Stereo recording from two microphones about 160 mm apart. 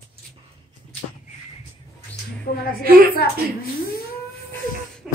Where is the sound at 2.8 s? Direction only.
65° right (ahead or behind).